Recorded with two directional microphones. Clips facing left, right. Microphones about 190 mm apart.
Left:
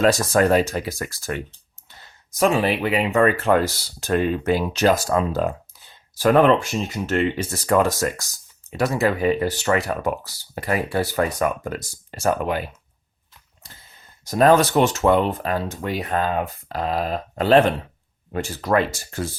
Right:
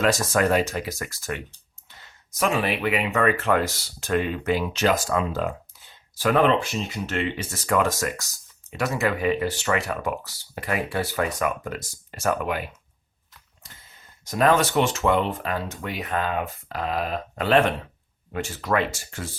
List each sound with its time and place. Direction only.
0.0 s speech: 35° left (ahead or behind)
2.4 s speech: 30° left (ahead or behind)
14.3 s speech: 35° left (ahead or behind)